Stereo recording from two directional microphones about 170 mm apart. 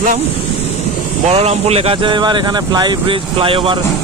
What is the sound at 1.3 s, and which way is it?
Speech, 35° right (ahead or behind).